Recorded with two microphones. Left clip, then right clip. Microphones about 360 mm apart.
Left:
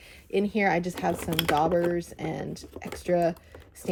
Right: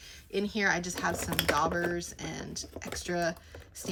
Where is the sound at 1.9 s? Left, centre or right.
Centre.